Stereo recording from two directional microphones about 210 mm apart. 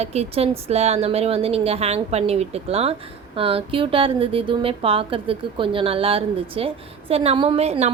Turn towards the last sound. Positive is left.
turn(degrees=-30)  # may be behind; listen again after turning